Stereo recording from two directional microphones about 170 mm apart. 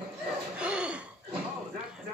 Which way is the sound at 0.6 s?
5° right (ahead or behind).